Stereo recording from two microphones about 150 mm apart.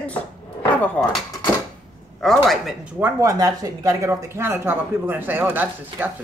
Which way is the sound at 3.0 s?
20° right (ahead or behind).